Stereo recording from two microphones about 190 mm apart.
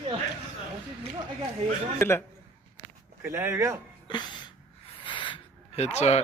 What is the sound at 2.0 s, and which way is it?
Speech, 15° left (ahead or behind).